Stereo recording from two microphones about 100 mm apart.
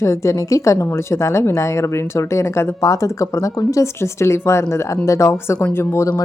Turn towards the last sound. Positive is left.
turn(degrees=25)  # may be behind; listen again after turning